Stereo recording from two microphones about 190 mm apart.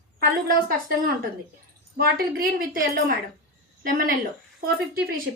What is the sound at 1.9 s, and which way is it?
A woman's voice, 55° right (ahead or behind).